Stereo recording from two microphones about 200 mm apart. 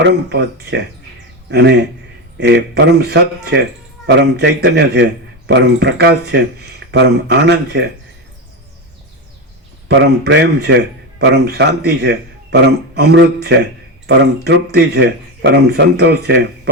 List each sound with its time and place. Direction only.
0.0 s speech: 60° right (ahead or behind)
9.9 s speech: 60° right (ahead or behind)